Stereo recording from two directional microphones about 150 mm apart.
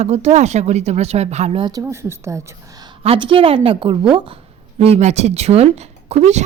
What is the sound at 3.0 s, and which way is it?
Speech, 35° right (ahead or behind).